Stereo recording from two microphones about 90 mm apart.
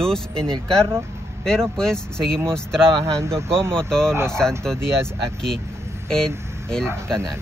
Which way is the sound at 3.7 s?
10° left (ahead or behind).